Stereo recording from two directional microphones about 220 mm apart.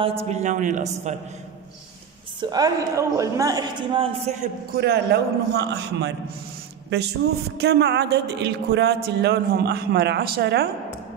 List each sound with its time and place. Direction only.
0.3 s a man's voice: 30° right (ahead or behind)
2.5 s a man's voice: 15° right (ahead or behind)
4.7 s a man's voice: 45° right (ahead or behind)
7.5 s a man's voice: 50° right (ahead or behind)